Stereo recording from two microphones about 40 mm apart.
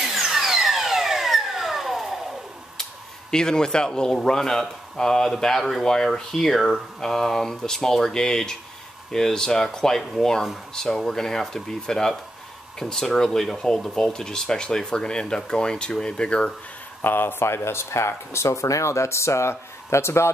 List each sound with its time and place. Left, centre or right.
0.0 s a sound: centre
2.8 s speech: centre
17.0 s speech: left